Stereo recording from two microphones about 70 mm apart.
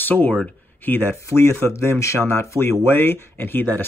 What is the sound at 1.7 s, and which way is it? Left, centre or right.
Speech, left.